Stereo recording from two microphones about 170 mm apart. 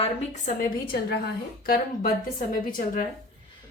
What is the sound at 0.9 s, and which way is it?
A woman's voice, 70° left (ahead or behind).